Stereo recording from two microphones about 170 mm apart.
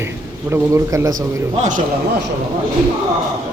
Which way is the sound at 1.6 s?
50° right (ahead or behind).